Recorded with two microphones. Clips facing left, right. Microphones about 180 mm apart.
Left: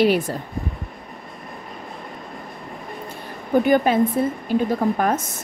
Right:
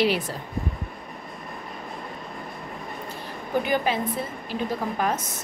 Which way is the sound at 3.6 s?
50° left (ahead or behind).